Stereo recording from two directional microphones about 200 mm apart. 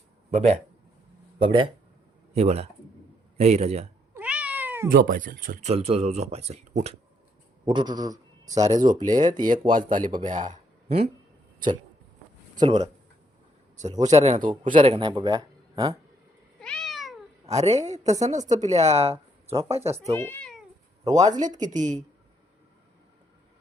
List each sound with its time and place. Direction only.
0.3 s speech: 35° right (ahead or behind)
4.1 s cat: 5° right (ahead or behind)
4.9 s speech: 45° right (ahead or behind)
5.7 s speech: 30° right (ahead or behind)
9.2 s speech: 40° right (ahead or behind)
12.6 s speech: 35° right (ahead or behind)
14.1 s speech: 35° right (ahead or behind); by 16.0 s 15° right (ahead or behind)
16.6 s cat: 5° left (ahead or behind)
17.5 s speech: 35° right (ahead or behind)
19.8 s speech: 15° right (ahead or behind)
20.1 s cat: 10° left (ahead or behind)
21.0 s speech: 20° right (ahead or behind)
21.7 s speech: 35° right (ahead or behind)